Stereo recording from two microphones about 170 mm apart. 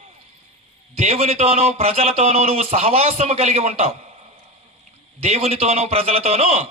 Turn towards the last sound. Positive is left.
turn(degrees=-35)  # may be behind; listen again after turning